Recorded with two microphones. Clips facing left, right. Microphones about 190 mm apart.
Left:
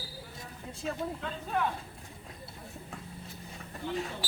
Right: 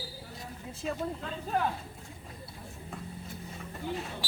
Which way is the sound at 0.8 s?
Centre (ahead or behind).